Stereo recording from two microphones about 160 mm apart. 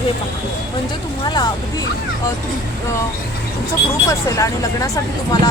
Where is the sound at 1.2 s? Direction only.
25° left (ahead or behind).